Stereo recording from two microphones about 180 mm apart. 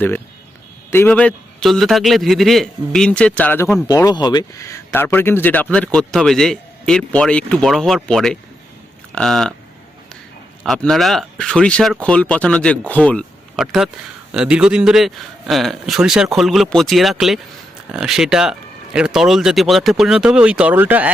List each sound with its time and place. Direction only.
0.9 s speech: 10° left (ahead or behind)
3.8 s speech: 20° left (ahead or behind); by 9.6 s centre (ahead or behind)
10.6 s speech: centre (ahead or behind)